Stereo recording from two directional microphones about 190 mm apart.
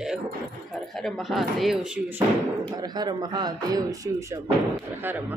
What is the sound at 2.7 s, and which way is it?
Speech, 20° right (ahead or behind).